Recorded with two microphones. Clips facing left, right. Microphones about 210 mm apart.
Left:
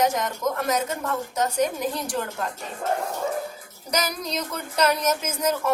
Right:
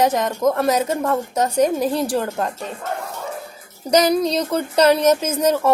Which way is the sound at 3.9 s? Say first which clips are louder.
Right 11 dB; 30° right (ahead or behind).